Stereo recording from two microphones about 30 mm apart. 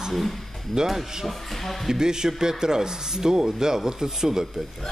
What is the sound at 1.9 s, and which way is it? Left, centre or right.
Speech, right.